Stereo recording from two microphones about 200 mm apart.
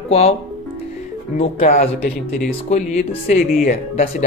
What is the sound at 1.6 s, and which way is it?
Speech, 45° left (ahead or behind).